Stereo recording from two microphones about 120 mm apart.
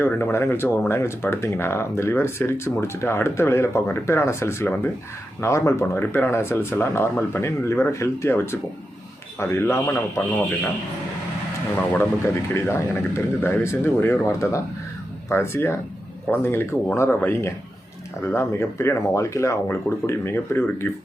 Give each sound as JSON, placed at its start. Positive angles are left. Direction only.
{"t": 0.0, "sound": "speech", "side_deg": 20}
{"t": 11.9, "sound": "speech", "side_deg": 20}